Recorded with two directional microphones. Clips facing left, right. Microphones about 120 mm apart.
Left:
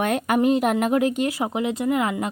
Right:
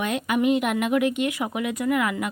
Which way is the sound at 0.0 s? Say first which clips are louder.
Left 3 dB; 45° left (ahead or behind).